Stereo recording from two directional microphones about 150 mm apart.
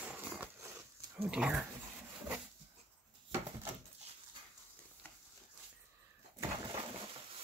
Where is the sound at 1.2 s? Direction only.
5° right (ahead or behind).